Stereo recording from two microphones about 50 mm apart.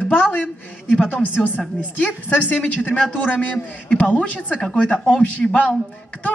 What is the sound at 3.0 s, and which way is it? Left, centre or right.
A man's voice, left.